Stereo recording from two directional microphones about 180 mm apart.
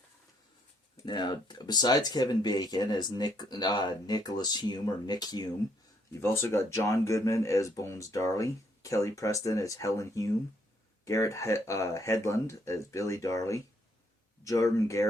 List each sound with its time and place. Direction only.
1.0 s speech: 25° left (ahead or behind)